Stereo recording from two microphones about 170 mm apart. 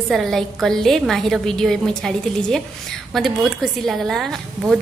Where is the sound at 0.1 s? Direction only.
Centre (ahead or behind).